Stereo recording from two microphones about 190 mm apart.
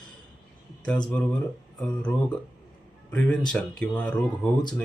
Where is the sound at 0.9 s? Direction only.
5° left (ahead or behind).